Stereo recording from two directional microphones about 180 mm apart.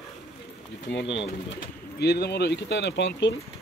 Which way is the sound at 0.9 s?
80° left.